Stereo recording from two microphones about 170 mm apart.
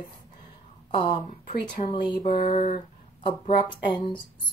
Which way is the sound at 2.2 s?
45° left (ahead or behind).